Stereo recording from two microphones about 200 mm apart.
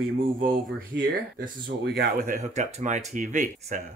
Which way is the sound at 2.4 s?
35° right (ahead or behind).